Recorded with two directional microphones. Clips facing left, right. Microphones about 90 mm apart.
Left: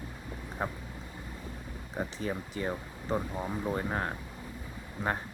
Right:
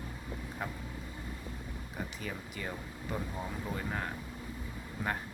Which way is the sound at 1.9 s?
30° left (ahead or behind).